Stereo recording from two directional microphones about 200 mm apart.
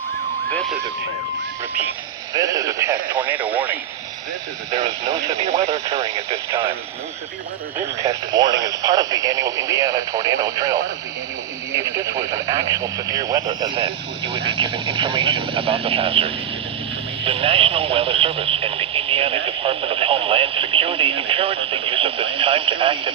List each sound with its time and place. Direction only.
2.3 s speech: 15° right (ahead or behind)
6.1 s speech: 30° right (ahead or behind)
8.3 s speech: 20° right (ahead or behind)